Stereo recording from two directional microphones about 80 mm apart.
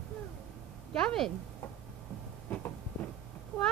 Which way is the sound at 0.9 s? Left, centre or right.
Centre.